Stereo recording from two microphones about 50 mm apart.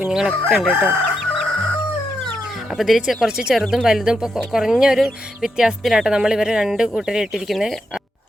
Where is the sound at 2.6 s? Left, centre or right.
Centre.